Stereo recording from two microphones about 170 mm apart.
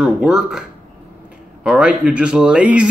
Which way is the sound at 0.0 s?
5° right (ahead or behind).